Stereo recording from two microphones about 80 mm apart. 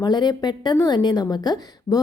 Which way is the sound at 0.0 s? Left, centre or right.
Left.